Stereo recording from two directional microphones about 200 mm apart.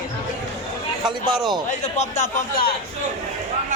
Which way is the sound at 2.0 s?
35° left (ahead or behind).